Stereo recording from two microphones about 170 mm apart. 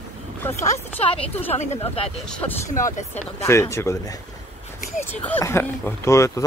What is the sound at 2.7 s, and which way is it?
Speech, 45° left (ahead or behind).